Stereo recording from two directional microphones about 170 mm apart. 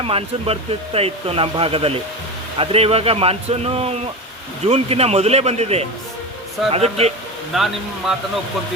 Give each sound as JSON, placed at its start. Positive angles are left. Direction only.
{"t": 0.0, "sound": "speech", "side_deg": -35}
{"t": 7.5, "sound": "speech", "side_deg": 0}